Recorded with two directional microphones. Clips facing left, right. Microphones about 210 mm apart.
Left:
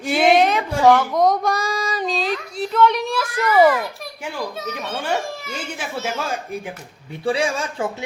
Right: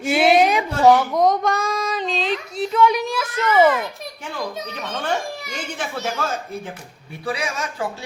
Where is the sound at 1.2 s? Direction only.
10° left (ahead or behind).